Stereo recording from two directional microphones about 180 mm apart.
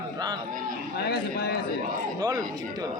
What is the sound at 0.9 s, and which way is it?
Speech, 65° left (ahead or behind).